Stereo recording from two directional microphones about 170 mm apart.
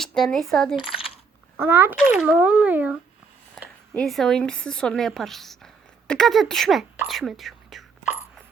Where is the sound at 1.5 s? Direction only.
15° right (ahead or behind).